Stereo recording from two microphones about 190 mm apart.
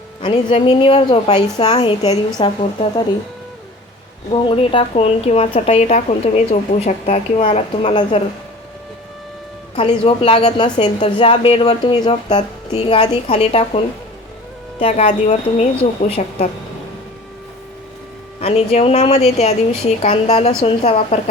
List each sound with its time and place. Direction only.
0.2 s a woman's voice: 25° left (ahead or behind)
4.3 s speech: 25° left (ahead or behind)
9.7 s a woman's voice: 30° left (ahead or behind)
18.3 s speech: 35° left (ahead or behind)